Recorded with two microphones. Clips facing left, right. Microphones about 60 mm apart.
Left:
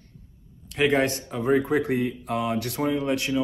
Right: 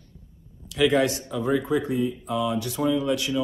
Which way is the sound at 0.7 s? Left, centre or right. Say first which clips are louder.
Right 1 dB; left.